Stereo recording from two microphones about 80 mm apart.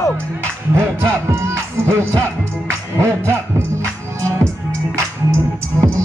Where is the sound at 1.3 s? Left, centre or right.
Right.